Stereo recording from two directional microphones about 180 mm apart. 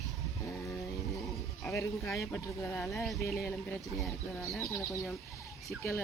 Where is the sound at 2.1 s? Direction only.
10° left (ahead or behind).